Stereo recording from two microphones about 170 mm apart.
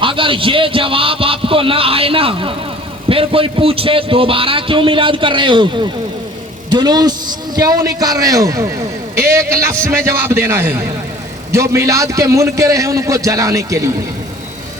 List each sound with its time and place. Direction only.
0.0 s a man's voice: 30° right (ahead or behind)